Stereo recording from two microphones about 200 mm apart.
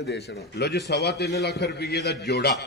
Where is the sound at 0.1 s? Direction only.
55° left (ahead or behind).